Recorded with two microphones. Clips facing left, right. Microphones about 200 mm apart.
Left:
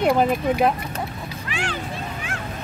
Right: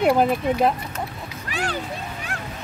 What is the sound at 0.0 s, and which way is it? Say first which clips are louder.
Speech: right 1 dB; 5° right (ahead or behind).